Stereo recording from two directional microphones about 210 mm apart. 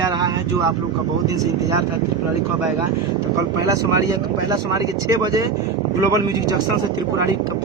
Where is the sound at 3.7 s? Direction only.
15° right (ahead or behind).